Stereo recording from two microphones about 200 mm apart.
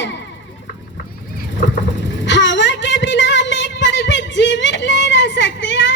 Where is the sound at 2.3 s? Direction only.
65° left (ahead or behind).